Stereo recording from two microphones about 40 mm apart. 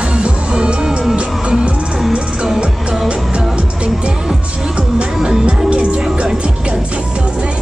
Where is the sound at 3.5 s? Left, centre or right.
Right.